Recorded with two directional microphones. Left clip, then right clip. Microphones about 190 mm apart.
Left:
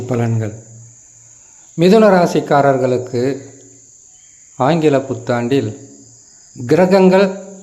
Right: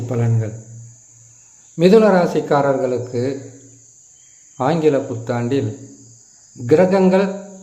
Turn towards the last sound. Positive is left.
turn(degrees=15)  # may be behind; listen again after turning